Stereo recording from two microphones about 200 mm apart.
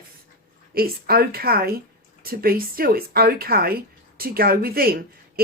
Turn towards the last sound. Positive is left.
turn(degrees=-50)  # may be behind; listen again after turning